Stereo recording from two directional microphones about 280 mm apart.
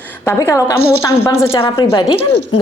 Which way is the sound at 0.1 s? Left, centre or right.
Centre.